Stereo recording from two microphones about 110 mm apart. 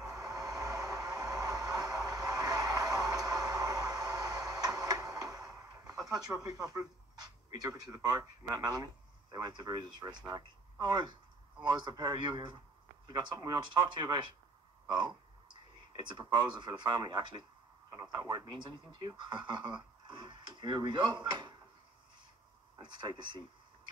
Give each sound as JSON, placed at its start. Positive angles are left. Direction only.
{"t": 0.1, "sound": "vehicle", "side_deg": -35}
{"t": 6.4, "sound": "speech", "side_deg": -35}
{"t": 20.1, "sound": "drawer open or close", "side_deg": -45}
{"t": 22.8, "sound": "speech", "side_deg": -45}